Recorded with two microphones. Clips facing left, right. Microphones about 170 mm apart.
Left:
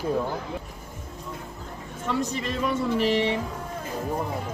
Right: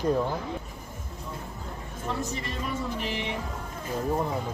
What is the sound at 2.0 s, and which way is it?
Speech, 75° left (ahead or behind).